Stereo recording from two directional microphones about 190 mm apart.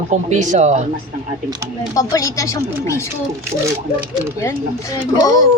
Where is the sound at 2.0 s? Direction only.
15° left (ahead or behind).